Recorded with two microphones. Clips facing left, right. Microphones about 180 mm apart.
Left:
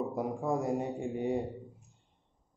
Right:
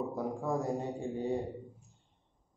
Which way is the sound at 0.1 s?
20° left (ahead or behind).